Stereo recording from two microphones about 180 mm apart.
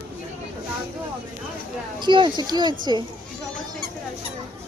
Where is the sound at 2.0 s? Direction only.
25° right (ahead or behind).